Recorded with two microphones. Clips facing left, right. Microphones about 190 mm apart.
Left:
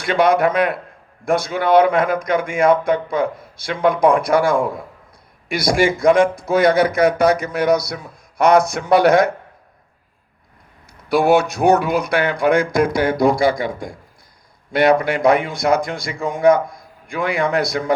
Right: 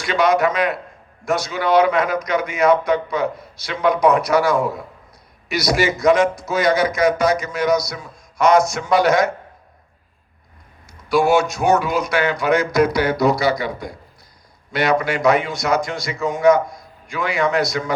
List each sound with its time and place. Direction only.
0.0 s a man's voice: 55° left (ahead or behind)
10.8 s a man's voice: 60° left (ahead or behind)